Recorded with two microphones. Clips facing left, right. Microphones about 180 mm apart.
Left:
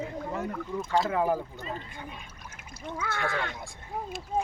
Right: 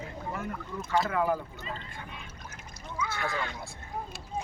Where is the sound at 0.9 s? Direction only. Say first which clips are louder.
Left 1 dB; 25° left (ahead or behind).